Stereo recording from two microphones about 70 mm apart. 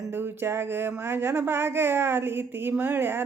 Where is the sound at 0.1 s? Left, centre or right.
Right.